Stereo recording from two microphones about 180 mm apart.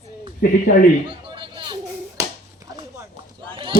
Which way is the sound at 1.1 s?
30° right (ahead or behind).